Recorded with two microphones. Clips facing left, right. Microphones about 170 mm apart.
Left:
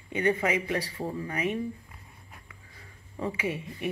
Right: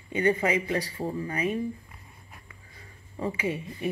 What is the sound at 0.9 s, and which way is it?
Speech, centre (ahead or behind).